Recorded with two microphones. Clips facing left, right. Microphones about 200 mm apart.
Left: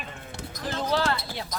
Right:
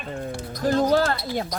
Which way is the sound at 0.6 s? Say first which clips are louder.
Right 7 dB; 45° right (ahead or behind).